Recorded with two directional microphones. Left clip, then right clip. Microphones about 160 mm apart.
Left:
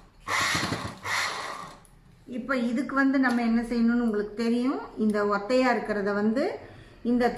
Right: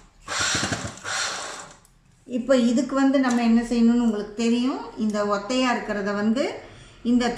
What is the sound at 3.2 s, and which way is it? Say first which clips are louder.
A woman's voice: right 3 dB; 10° right (ahead or behind).